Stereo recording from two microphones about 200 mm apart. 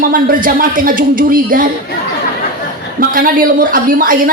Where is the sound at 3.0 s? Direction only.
45° right (ahead or behind).